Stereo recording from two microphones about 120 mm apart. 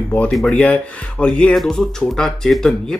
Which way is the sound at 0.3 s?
5° left (ahead or behind).